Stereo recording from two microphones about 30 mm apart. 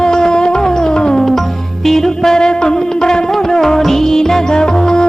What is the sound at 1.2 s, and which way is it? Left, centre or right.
Music, centre.